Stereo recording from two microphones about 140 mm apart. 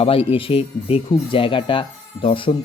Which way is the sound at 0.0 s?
45° left (ahead or behind).